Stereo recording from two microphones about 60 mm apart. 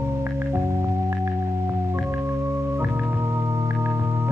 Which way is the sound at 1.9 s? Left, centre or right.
Right.